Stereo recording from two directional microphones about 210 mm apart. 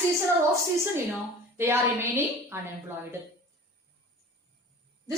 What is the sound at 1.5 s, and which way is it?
A woman's voice, 10° right (ahead or behind).